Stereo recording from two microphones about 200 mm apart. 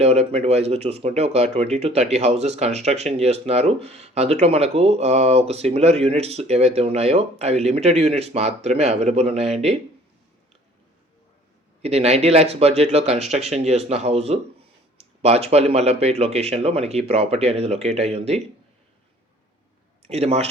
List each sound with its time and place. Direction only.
0.0 s speech: 30° right (ahead or behind)
11.8 s speech: 30° right (ahead or behind)
20.0 s speech: 30° right (ahead or behind)